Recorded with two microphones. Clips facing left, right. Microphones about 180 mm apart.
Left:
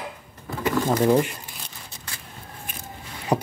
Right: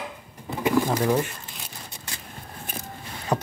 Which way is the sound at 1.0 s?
15° left (ahead or behind).